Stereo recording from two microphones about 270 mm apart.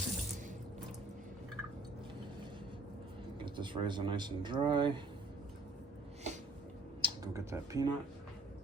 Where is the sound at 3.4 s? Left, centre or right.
Centre.